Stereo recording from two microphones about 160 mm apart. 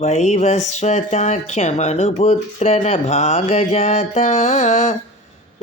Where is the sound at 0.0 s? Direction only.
45° left (ahead or behind).